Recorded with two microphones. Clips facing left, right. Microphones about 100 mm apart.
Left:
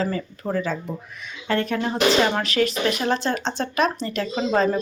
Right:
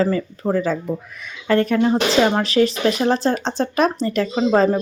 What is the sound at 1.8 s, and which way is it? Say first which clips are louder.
Speech: right 4 dB; 30° right (ahead or behind).